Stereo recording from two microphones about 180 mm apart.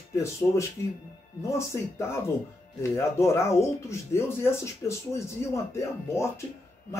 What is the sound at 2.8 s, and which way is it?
Speech, 15° left (ahead or behind).